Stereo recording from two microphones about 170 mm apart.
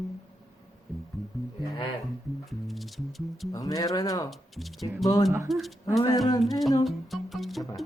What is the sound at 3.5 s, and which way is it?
Speech, 20° left (ahead or behind).